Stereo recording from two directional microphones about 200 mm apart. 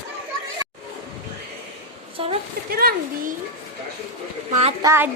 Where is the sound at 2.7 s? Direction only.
50° right (ahead or behind).